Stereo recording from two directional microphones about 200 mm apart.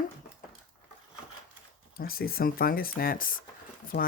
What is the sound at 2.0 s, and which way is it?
Speech, 50° left (ahead or behind).